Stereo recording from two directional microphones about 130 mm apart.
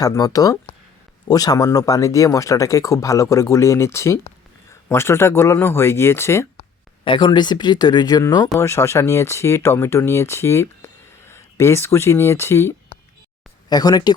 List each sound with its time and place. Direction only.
0.0 s speech: 30° left (ahead or behind)
7.0 s speech: 40° left (ahead or behind); by 12.7 s 20° left (ahead or behind)
13.7 s speech: 30° left (ahead or behind)